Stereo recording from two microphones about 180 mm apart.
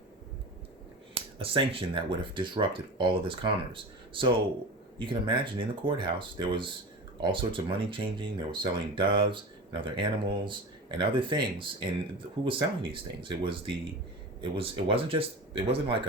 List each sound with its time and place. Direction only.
1.1 s speech: 30° right (ahead or behind)